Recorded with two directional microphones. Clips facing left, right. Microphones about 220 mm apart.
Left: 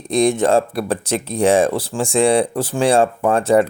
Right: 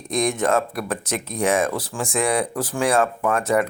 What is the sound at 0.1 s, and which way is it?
Speech, 30° left (ahead or behind).